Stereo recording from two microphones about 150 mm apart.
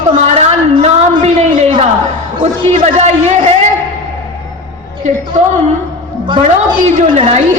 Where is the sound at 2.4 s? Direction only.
50° right (ahead or behind).